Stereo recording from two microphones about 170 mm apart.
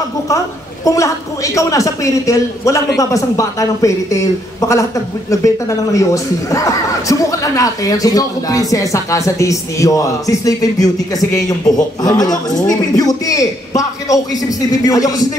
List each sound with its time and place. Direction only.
0.8 s speech: 20° left (ahead or behind)